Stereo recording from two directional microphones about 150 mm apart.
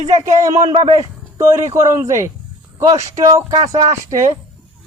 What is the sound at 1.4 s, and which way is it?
Speech, 20° right (ahead or behind).